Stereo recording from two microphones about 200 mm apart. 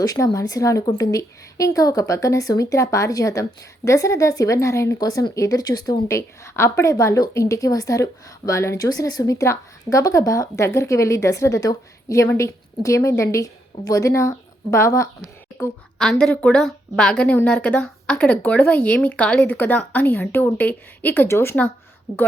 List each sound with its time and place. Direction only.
0.0 s a woman's voice: 15° left (ahead or behind)